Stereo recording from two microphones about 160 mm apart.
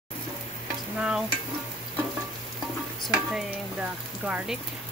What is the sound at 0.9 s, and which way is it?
Speech, 5° right (ahead or behind).